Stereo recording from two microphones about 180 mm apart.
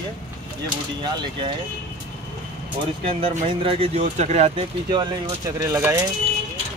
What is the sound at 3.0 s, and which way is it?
Speech, 30° right (ahead or behind).